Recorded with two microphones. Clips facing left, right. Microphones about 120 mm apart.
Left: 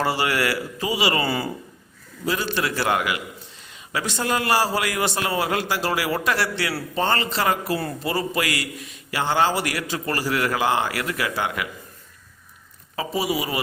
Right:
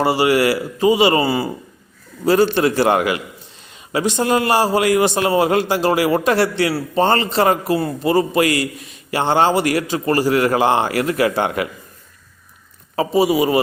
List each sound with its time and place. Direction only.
0.0 s a man's voice: 15° right (ahead or behind)
1.2 s a man's voice: 15° right (ahead or behind)
2.3 s a man's voice: 35° right (ahead or behind)
13.0 s a man's voice: 25° right (ahead or behind)